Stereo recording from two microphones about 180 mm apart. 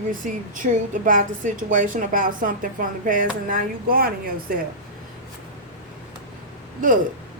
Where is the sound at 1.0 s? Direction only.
45° right (ahead or behind).